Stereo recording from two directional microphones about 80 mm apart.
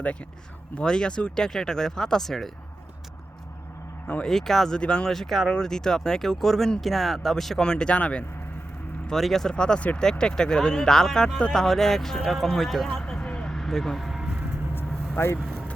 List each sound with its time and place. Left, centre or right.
0.0 s speech: centre
4.0 s speech: centre
9.0 s speech: centre
14.8 s vehicle: left
15.4 s vehicle: centre